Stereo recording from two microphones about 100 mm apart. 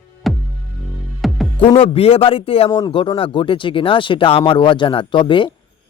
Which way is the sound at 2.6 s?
35° left (ahead or behind).